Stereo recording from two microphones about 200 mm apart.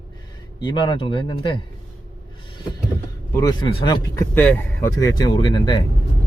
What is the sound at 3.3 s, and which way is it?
Speech, 20° left (ahead or behind).